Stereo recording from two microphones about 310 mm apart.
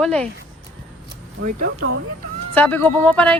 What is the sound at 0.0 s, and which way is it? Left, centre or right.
Speech, centre.